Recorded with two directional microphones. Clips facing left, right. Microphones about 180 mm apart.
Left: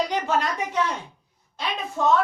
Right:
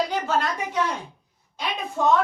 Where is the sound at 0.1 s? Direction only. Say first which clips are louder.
Even; centre (ahead or behind).